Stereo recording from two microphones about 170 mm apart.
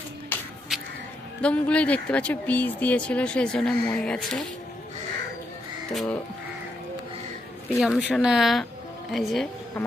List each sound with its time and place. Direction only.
0.3 s music: 10° left (ahead or behind)
0.7 s music: centre (ahead or behind)
1.4 s speech: 5° left (ahead or behind)
5.9 s speech: centre (ahead or behind)
7.8 s speech: 5° right (ahead or behind)